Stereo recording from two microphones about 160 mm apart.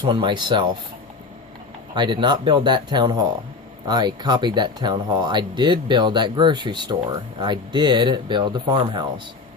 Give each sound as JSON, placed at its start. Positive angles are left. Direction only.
{"t": 0.0, "sound": "speech", "side_deg": -30}
{"t": 2.0, "sound": "speech", "side_deg": -30}